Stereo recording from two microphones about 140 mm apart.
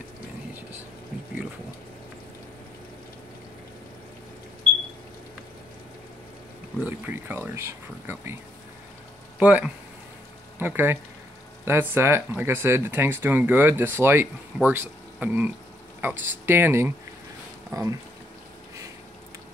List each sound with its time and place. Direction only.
6.8 s speech: 15° right (ahead or behind)
9.4 s speech: 10° right (ahead or behind)